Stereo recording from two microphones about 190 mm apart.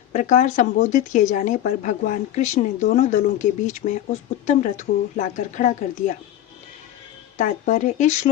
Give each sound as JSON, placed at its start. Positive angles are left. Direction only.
{"t": 0.1, "sound": "speech", "side_deg": 40}
{"t": 7.3, "sound": "speech", "side_deg": 40}